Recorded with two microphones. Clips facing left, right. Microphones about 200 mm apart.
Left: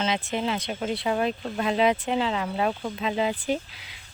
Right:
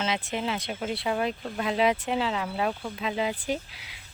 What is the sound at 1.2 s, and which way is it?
Speech, 25° left (ahead or behind).